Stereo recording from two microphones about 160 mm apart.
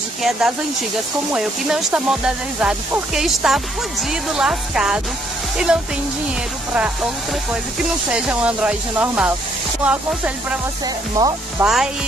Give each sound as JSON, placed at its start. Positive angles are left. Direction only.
{"t": 1.3, "sound": "speech", "side_deg": -5}
{"t": 8.1, "sound": "speech", "side_deg": -5}
{"t": 11.2, "sound": "speech", "side_deg": -20}
{"t": 11.6, "sound": "speech", "side_deg": -5}